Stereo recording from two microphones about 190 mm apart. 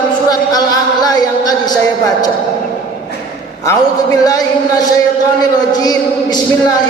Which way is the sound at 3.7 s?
20° left (ahead or behind).